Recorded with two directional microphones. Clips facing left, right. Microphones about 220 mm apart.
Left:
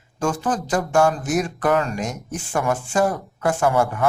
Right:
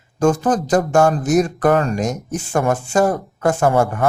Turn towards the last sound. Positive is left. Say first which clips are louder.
# right 3 dB
turn(degrees=-45)  # may be behind; listen again after turning